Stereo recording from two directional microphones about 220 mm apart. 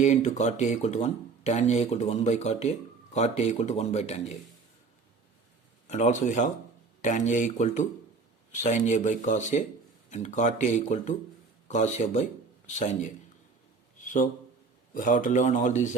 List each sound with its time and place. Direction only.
0.0 s speech: 30° left (ahead or behind)
5.9 s speech: 35° left (ahead or behind)
14.0 s a sound: 35° left (ahead or behind)
14.9 s speech: 35° left (ahead or behind)